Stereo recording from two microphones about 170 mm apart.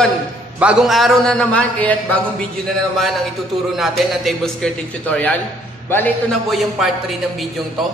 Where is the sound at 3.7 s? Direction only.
Centre (ahead or behind).